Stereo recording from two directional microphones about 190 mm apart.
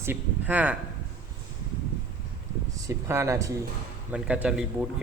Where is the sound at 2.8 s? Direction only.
15° right (ahead or behind).